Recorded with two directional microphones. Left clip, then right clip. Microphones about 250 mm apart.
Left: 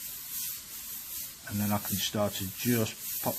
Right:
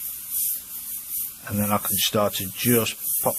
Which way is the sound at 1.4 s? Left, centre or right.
Right.